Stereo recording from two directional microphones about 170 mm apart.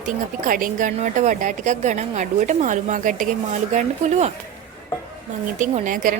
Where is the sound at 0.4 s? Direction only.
55° right (ahead or behind).